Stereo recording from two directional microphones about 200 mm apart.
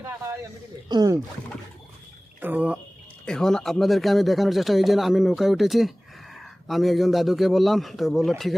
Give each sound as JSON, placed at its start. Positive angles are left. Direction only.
{"t": 0.9, "sound": "speech", "side_deg": -20}
{"t": 2.4, "sound": "speech", "side_deg": -10}
{"t": 3.2, "sound": "speech", "side_deg": 5}